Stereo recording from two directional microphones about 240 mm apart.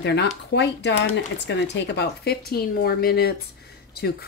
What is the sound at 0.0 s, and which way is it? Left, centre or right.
Speech, left.